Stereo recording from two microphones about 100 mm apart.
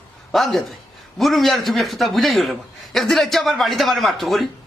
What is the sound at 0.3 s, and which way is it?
A man's voice, centre (ahead or behind).